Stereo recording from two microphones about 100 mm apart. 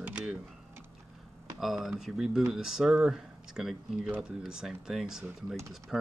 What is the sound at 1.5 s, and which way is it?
Speech, centre (ahead or behind).